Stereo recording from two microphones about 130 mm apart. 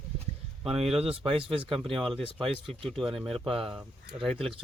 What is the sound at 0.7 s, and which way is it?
Speech, 50° right (ahead or behind).